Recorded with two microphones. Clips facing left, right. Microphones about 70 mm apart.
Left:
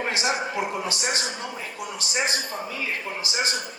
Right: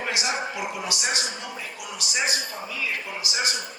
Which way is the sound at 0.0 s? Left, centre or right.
Left.